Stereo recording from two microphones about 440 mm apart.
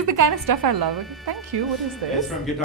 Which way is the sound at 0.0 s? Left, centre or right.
Right.